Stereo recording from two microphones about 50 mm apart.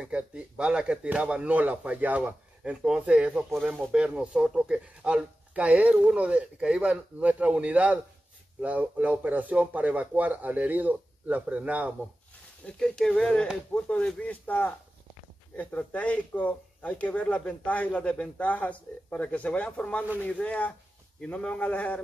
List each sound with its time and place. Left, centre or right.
0.0 s speech: right
2.6 s speech: centre
12.6 s speech: centre